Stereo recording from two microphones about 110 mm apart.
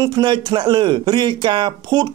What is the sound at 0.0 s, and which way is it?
A man's voice, 40° right (ahead or behind).